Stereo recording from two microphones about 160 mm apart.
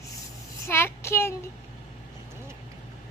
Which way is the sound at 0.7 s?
15° left (ahead or behind).